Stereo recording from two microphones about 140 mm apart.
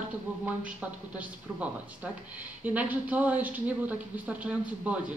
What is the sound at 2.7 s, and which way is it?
Speech, 10° right (ahead or behind).